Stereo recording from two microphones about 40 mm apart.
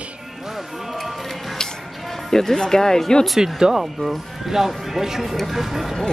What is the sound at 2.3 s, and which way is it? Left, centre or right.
Speech, centre.